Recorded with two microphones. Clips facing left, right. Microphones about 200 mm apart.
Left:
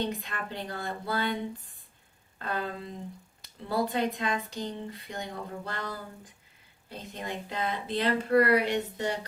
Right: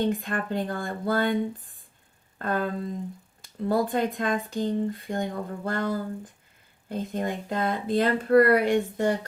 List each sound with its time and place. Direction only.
0.1 s speech: 50° right (ahead or behind)